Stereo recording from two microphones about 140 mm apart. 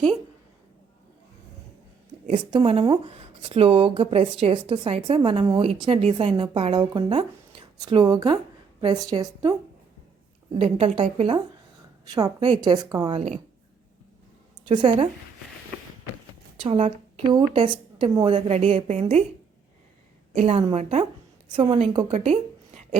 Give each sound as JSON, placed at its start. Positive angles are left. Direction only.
{"t": 2.2, "sound": "speech", "side_deg": -40}
{"t": 6.3, "sound": "a woman's voice", "side_deg": -35}
{"t": 10.5, "sound": "a woman's voice", "side_deg": -45}
{"t": 12.1, "sound": "a woman's voice", "side_deg": -25}
{"t": 13.1, "sound": "a woman's voice", "side_deg": -55}
{"t": 14.7, "sound": "speech", "side_deg": -30}
{"t": 16.6, "sound": "a woman's voice", "side_deg": -40}
{"t": 20.4, "sound": "a woman's voice", "side_deg": -45}